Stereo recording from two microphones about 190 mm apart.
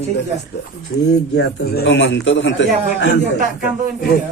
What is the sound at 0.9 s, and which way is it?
A man's voice, 60° left (ahead or behind).